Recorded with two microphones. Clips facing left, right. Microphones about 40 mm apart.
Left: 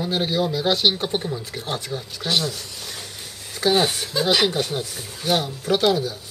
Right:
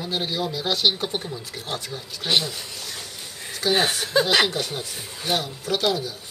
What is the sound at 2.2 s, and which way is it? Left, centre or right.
Speech, centre.